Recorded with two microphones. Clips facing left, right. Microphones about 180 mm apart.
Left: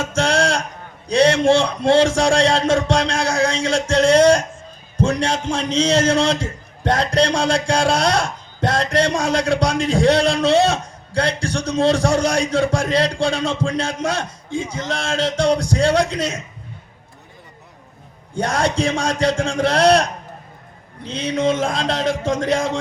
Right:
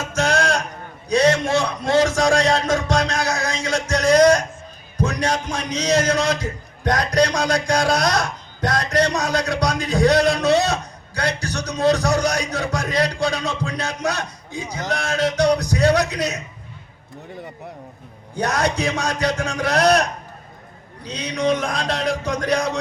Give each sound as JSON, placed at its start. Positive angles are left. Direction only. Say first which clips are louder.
{"t": 0.0, "sound": "a sound", "louder": "left 2 dB", "side_deg": 30}
{"t": 1.0, "sound": "a man's voice", "louder": "left 3 dB", "side_deg": 30}
{"t": 18.3, "sound": "a man's voice", "louder": "left 2 dB", "side_deg": 30}
{"t": 21.2, "sound": "a man's voice", "louder": "left 2 dB", "side_deg": 25}